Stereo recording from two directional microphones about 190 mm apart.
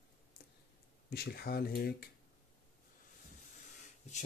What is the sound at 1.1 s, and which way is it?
Speech, 55° left (ahead or behind).